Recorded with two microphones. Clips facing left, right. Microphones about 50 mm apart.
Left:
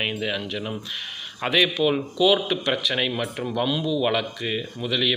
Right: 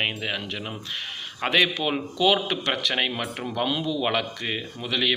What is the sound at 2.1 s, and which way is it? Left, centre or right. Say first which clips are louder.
Speech: right 1 dB; right.